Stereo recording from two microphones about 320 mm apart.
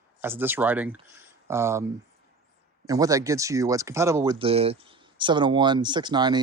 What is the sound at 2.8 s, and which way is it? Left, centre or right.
Speech, centre.